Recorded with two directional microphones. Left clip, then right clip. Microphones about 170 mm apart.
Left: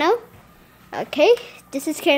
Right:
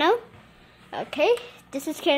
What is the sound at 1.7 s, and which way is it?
Speech, 20° left (ahead or behind).